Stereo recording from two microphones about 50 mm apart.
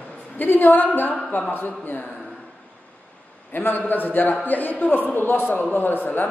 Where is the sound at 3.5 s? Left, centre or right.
Left.